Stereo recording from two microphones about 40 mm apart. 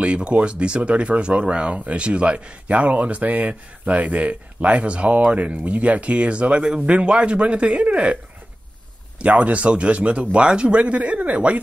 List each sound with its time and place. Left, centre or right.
0.0 s speech: right
9.2 s speech: right